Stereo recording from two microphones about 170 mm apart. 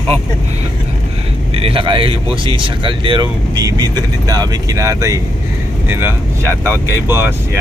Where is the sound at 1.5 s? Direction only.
35° right (ahead or behind); by 7.6 s 15° right (ahead or behind).